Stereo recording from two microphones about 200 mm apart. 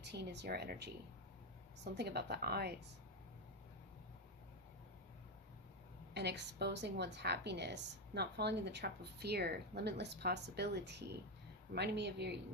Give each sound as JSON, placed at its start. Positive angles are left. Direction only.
{"t": 0.0, "sound": "a woman's voice", "side_deg": -55}
{"t": 6.1, "sound": "a woman's voice", "side_deg": -55}